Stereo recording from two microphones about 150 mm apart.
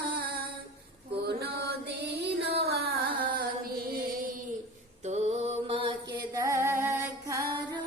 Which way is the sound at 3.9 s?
70° right (ahead or behind).